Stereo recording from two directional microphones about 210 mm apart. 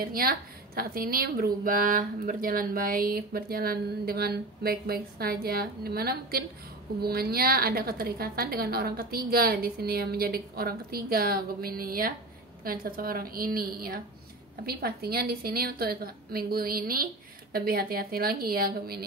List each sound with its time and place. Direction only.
0.0 s a woman's voice: 45° right (ahead or behind)